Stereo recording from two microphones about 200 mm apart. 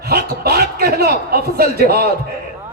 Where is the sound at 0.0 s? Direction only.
50° right (ahead or behind).